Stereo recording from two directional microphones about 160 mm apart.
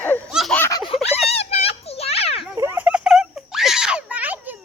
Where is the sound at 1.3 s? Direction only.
40° left (ahead or behind).